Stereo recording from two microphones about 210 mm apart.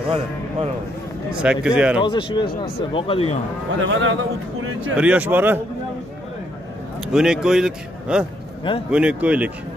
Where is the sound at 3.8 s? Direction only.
65° right (ahead or behind).